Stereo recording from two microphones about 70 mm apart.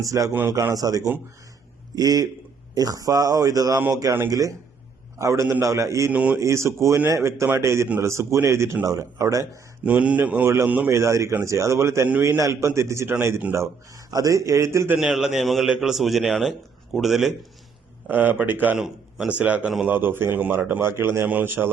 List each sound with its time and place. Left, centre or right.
0.0 s a man's voice: right
5.2 s a man's voice: right
6.1 s speech: centre
6.4 s a man's voice: right
9.8 s speech: centre
10.8 s a man's voice: right
14.9 s a man's voice: centre
18.1 s speech: right
18.8 s a man's voice: centre
19.3 s speech: centre
19.9 s a man's voice: right
21.2 s speech: right